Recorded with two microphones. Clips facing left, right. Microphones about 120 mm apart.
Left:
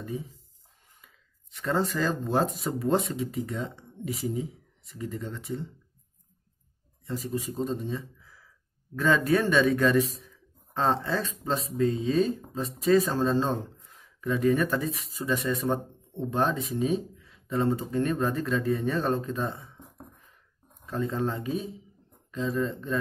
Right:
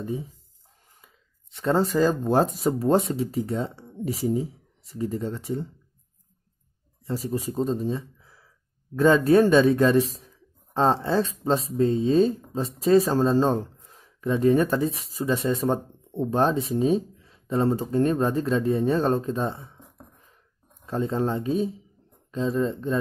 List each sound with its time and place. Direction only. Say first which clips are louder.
1.0 s speech: right 2 dB; 30° right (ahead or behind)
7.1 s speech: right 4 dB; 35° right (ahead or behind)
20.8 s speech: right 4 dB; 30° right (ahead or behind)